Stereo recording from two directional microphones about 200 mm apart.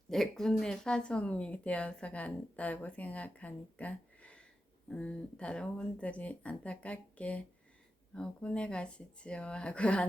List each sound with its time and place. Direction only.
0.1 s speech: centre (ahead or behind)